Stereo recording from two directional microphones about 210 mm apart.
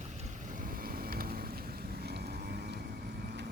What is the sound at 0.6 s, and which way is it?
Vehicle, 40° right (ahead or behind).